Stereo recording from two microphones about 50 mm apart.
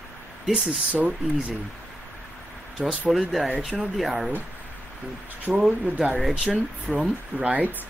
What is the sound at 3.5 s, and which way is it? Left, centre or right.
Speech, centre.